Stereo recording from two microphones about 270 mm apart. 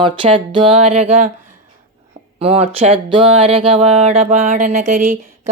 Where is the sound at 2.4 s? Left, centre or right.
Right.